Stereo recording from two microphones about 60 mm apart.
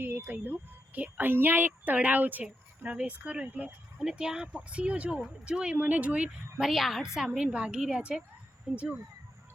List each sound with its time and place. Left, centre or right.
0.0 s speech: right
6.6 s a woman's voice: centre
7.3 s speech: centre